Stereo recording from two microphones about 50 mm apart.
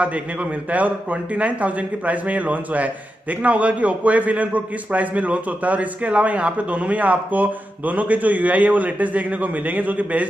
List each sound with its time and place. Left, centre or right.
0.0 s a man's voice: right